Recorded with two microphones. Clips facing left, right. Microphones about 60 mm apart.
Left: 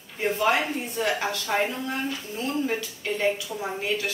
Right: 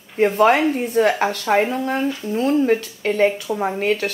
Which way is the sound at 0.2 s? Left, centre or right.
Right.